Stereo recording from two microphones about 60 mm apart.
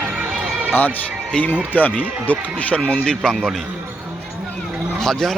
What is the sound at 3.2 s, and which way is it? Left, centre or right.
Speech, centre.